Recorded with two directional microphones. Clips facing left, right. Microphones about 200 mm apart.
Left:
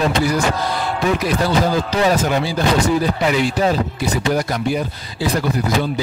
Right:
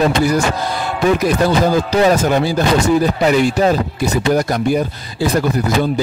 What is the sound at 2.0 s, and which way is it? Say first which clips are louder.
Speech: right 4 dB; 45° right (ahead or behind).